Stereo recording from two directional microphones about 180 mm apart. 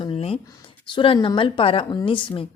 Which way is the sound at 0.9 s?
30° left (ahead or behind).